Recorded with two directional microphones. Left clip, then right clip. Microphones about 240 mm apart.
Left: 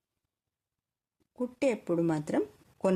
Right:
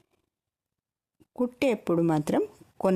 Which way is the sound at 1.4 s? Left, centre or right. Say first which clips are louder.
Right 4 dB; right.